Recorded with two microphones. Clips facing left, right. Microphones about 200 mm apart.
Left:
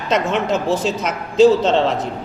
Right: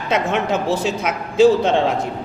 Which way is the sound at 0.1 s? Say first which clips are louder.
Left 1 dB; 55° right (ahead or behind).